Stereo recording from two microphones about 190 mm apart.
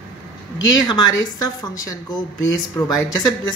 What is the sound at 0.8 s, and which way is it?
Speech, 20° left (ahead or behind).